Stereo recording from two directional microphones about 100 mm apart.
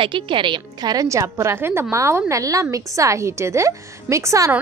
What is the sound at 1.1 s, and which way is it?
A woman's voice, 30° right (ahead or behind).